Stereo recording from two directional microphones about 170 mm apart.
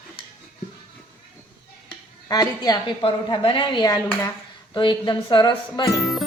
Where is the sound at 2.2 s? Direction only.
20° left (ahead or behind).